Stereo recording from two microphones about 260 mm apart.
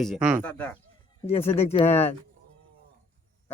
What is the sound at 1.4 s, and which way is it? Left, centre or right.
Speech, left.